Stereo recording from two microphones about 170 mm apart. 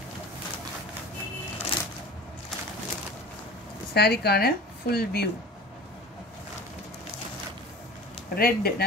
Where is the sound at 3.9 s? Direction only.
70° left (ahead or behind).